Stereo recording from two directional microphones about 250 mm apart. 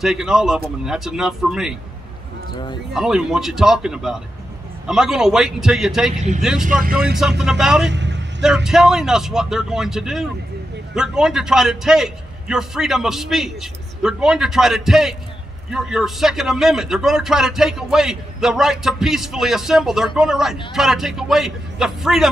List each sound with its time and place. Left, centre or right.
0.0 s a man's voice: centre
2.9 s a man's voice: centre
6.8 s speech: right
7.2 s a man's voice: centre
7.9 s vehicle: right
8.4 s a man's voice: centre